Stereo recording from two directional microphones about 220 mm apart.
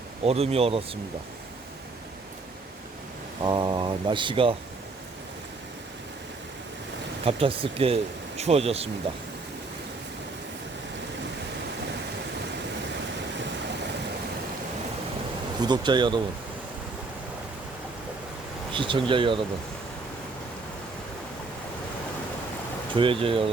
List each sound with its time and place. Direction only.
0.3 s speech: 25° right (ahead or behind)
3.4 s speech: 20° right (ahead or behind)
7.3 s speech: 25° right (ahead or behind)
15.6 s speech: 20° right (ahead or behind)
18.7 s speech: 20° right (ahead or behind)
23.0 s speech: 25° right (ahead or behind)